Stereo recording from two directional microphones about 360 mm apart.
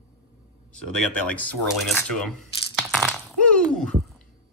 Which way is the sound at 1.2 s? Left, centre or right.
Centre.